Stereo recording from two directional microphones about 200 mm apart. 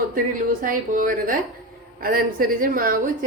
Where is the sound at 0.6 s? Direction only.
45° right (ahead or behind).